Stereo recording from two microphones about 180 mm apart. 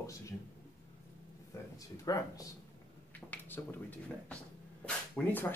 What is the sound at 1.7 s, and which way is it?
A man's voice, 20° left (ahead or behind).